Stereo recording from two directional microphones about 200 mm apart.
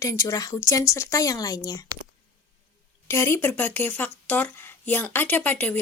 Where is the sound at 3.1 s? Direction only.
15° left (ahead or behind).